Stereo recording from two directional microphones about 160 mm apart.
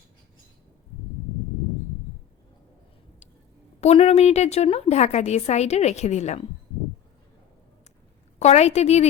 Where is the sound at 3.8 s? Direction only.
40° left (ahead or behind).